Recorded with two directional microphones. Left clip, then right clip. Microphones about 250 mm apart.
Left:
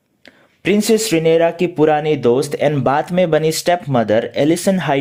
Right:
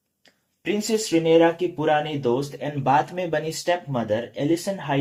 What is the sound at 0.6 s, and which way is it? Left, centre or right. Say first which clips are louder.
Speech: left 10 dB; left.